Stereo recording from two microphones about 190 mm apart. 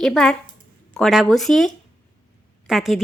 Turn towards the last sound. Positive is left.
turn(degrees=0)  # may be behind; listen again after turning